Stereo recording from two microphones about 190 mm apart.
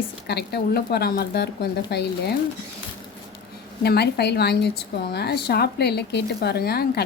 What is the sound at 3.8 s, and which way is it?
Speech, 60° left (ahead or behind).